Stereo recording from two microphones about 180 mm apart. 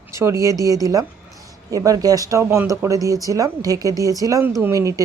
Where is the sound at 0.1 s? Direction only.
15° right (ahead or behind).